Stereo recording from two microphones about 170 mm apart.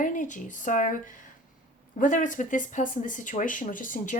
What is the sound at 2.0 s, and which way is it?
A woman's voice, 50° left (ahead or behind).